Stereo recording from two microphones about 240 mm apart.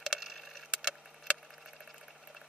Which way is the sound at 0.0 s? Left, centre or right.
Centre.